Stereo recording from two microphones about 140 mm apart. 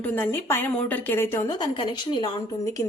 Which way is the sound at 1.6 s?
30° left (ahead or behind).